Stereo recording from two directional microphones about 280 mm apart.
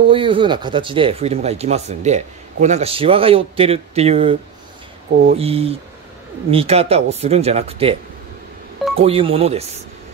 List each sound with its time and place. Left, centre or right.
0.0 s speech: centre